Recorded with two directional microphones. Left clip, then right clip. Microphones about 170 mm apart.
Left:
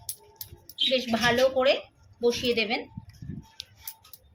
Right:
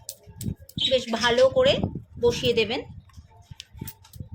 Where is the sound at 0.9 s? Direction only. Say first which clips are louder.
Right 2 dB; 25° right (ahead or behind).